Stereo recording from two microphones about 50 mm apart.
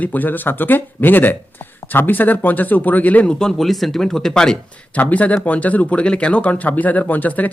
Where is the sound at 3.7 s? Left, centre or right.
Centre.